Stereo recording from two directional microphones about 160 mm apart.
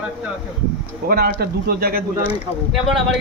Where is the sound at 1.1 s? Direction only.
75° right (ahead or behind).